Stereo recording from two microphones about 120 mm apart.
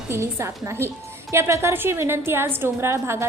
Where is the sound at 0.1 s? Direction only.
20° right (ahead or behind).